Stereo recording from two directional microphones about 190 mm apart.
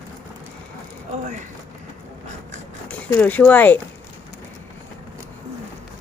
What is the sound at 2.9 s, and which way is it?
Speech, 10° left (ahead or behind).